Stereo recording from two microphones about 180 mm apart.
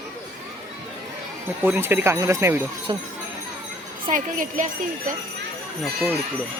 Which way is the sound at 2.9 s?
25° right (ahead or behind).